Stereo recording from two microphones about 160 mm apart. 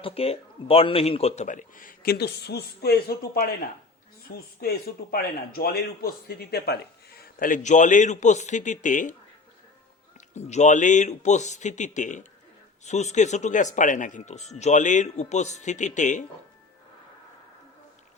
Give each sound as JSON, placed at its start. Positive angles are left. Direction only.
{"t": 0.0, "sound": "speech", "side_deg": 40}
{"t": 10.2, "sound": "speech", "side_deg": 45}